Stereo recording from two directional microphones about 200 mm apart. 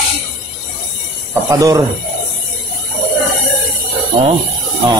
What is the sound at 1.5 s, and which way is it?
Speech, 15° right (ahead or behind).